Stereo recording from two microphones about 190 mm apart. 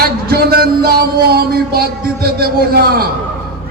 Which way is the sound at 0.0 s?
55° right (ahead or behind).